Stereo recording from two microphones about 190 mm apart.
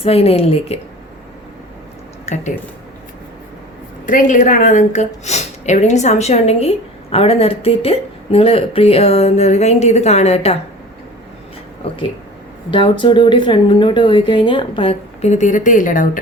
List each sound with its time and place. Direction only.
0.0 s speech: 30° left (ahead or behind)
2.2 s speech: 35° left (ahead or behind)
4.0 s speech: 45° left (ahead or behind)
12.7 s speech: 25° left (ahead or behind); by 16.0 s 45° left (ahead or behind)